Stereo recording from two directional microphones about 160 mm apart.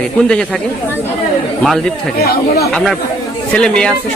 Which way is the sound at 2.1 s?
80° left.